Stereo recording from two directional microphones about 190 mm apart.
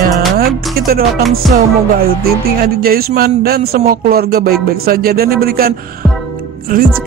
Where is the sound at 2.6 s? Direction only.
55° right (ahead or behind).